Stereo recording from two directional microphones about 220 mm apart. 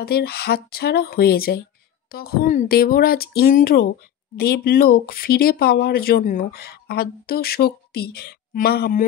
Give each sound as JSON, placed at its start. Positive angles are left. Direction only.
{"t": 0.0, "sound": "speech", "side_deg": 45}